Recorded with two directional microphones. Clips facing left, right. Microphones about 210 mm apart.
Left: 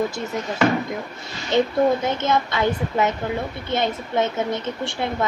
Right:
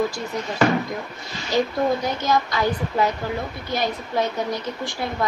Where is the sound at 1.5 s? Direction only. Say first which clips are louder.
Left 3 dB; 25° left (ahead or behind).